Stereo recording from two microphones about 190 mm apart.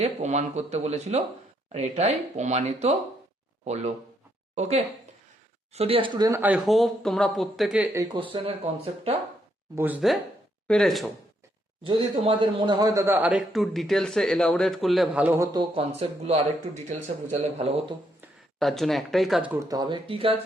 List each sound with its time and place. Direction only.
0.0 s speech: 35° right (ahead or behind)
5.7 s speech: 30° right (ahead or behind); by 7.9 s centre (ahead or behind)
7.9 s speech: 25° right (ahead or behind)
9.7 s speech: 10° right (ahead or behind)
11.8 s speech: 25° right (ahead or behind); by 15.4 s 10° right (ahead or behind)
15.5 s speech: 30° right (ahead or behind)
18.6 s speech: centre (ahead or behind)
19.6 s speech: 20° right (ahead or behind)